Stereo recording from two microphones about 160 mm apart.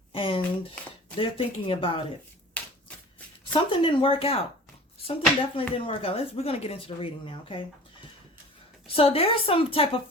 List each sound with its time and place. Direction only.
0.1 s a sound: 30° left (ahead or behind)
1.1 s speech: 35° left (ahead or behind)
3.5 s speech: 30° left (ahead or behind)
8.9 s speech: 35° left (ahead or behind)